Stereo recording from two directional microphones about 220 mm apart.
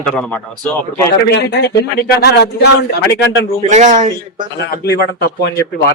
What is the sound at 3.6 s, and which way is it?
Speech, 35° right (ahead or behind).